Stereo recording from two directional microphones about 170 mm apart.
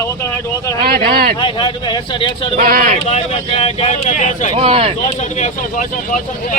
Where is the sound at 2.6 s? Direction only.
55° right (ahead or behind).